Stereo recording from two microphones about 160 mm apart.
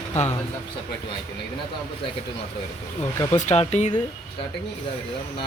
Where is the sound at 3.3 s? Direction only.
45° left (ahead or behind).